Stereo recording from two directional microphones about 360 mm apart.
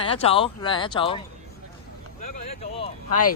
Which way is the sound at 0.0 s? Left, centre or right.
Centre.